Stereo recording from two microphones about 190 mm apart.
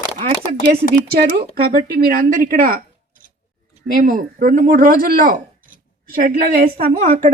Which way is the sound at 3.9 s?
50° right (ahead or behind).